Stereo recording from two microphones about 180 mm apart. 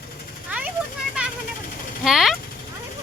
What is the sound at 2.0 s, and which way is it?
Speech, centre (ahead or behind).